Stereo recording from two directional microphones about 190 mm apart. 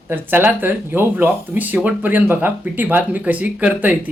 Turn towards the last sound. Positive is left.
turn(degrees=-10)  # may be behind; listen again after turning